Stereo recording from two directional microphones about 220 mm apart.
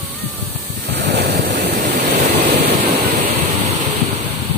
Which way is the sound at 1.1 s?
50° right (ahead or behind).